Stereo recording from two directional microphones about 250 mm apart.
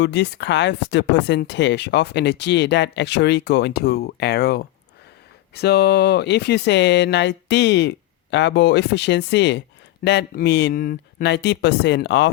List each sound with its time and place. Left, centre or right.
0.0 s speech: left